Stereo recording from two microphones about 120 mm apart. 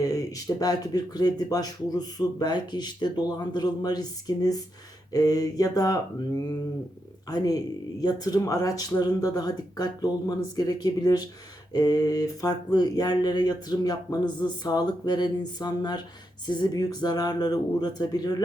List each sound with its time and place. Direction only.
0.0 s speech: 30° left (ahead or behind)